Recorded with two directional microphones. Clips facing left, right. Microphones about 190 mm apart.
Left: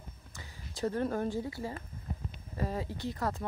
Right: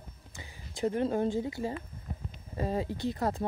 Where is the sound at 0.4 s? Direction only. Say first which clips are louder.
Right 3 dB; 20° right (ahead or behind).